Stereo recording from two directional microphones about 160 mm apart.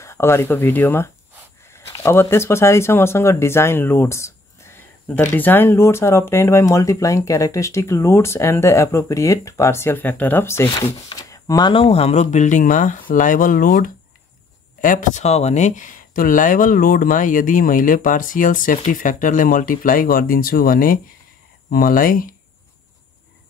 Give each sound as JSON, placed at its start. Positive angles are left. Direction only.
{"t": 0.0, "sound": "speech", "side_deg": 15}